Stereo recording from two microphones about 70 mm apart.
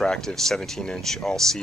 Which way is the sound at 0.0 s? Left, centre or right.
Centre.